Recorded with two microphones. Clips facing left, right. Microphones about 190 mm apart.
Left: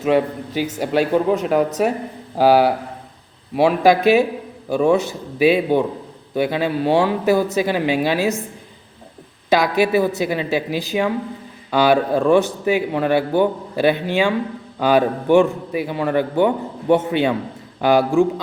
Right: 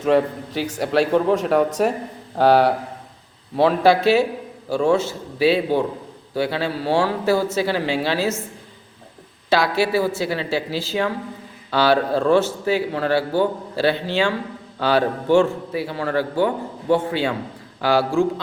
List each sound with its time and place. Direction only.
0.0 s speech: 5° left (ahead or behind)
9.5 s a man's voice: 15° left (ahead or behind)